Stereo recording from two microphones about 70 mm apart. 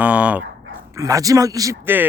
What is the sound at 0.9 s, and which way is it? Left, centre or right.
Speech, right.